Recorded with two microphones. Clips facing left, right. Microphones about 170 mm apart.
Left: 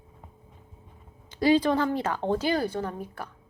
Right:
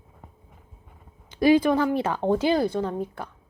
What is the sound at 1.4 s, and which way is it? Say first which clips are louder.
A woman's voice: right 3 dB; 15° right (ahead or behind).